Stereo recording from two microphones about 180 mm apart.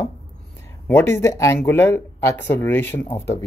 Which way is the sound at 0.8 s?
10° left (ahead or behind).